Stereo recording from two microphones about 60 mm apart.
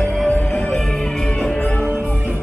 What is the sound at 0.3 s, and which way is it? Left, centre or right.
Music, left.